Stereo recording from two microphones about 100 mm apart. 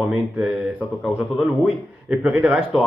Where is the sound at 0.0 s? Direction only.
15° right (ahead or behind).